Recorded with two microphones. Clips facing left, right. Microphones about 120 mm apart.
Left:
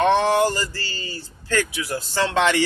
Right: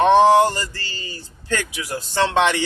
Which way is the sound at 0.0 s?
20° right (ahead or behind).